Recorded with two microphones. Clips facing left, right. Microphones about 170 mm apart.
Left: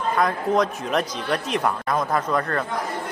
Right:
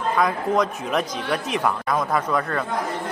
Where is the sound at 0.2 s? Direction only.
Centre (ahead or behind).